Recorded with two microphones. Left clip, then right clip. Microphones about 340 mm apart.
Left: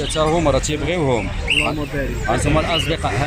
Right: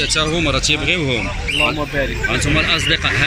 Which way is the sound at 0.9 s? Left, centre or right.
Left.